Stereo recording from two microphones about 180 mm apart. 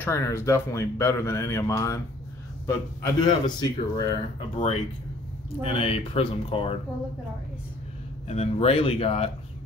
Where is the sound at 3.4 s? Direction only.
25° left (ahead or behind).